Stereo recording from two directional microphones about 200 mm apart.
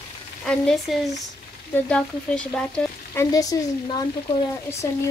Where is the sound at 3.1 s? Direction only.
15° left (ahead or behind).